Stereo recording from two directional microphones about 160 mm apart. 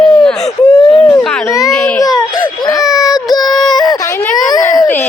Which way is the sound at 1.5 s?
20° left (ahead or behind).